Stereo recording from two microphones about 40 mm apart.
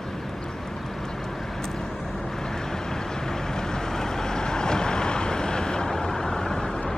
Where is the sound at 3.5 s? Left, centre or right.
Centre.